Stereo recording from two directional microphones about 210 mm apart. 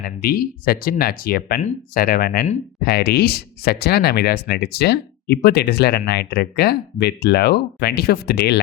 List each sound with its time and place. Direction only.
0.0 s speech: 45° left (ahead or behind)